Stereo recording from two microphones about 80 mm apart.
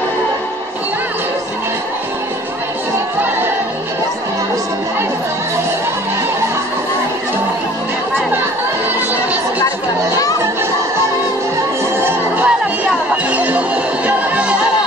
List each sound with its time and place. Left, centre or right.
12.0 s music: right
13.1 s music: centre